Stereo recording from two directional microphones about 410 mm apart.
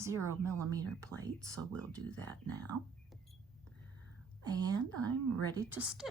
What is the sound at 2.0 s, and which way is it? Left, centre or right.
Speech, right.